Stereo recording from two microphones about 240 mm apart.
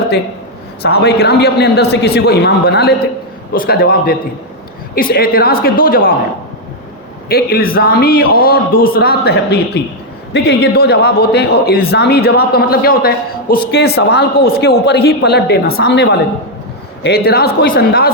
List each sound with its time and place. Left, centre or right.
0.8 s a man's voice: left
7.3 s a man's voice: left